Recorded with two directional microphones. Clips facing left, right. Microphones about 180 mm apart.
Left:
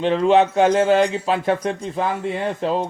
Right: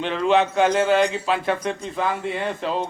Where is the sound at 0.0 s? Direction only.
35° left (ahead or behind).